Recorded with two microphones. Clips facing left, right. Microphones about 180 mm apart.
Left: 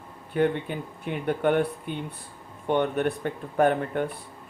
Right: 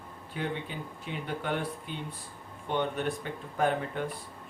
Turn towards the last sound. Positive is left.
turn(degrees=55)  # may be behind; listen again after turning